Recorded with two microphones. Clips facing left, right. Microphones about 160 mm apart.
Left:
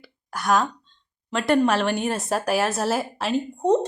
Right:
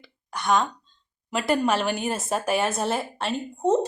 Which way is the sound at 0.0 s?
Centre (ahead or behind).